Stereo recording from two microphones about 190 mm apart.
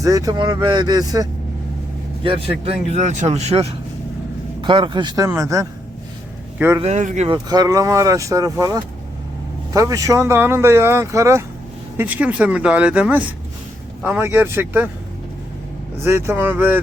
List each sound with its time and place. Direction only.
0.0 s speech: 20° right (ahead or behind)
6.7 s speech: 35° right (ahead or behind)
7.3 s speech: 20° right (ahead or behind)
16.0 s speech: 10° right (ahead or behind)